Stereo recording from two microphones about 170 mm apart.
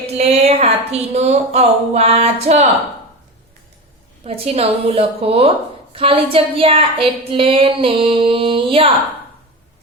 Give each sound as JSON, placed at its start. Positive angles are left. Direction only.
{"t": 0.2, "sound": "a woman's voice", "side_deg": -40}
{"t": 4.2, "sound": "a woman's voice", "side_deg": -35}